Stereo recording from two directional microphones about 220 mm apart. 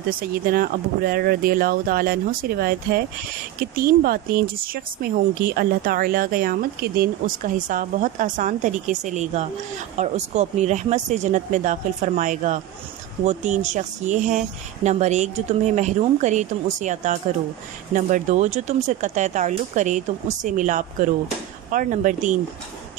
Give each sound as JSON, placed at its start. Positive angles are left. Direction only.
{"t": 0.1, "sound": "speech", "side_deg": -40}